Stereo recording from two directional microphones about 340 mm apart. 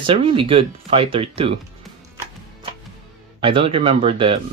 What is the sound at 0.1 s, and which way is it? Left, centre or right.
Speech, centre.